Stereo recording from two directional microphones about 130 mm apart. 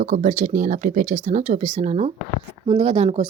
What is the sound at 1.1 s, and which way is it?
Speech, 60° right (ahead or behind).